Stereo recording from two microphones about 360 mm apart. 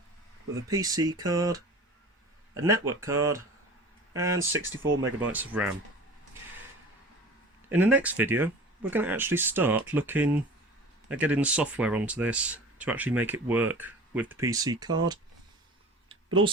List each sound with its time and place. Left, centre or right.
0.7 s speech: centre
4.4 s speech: right
5.2 s speech: centre
7.7 s speech: centre
16.0 s a sound: centre